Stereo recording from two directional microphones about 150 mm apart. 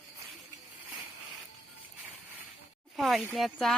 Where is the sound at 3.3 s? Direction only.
Centre (ahead or behind).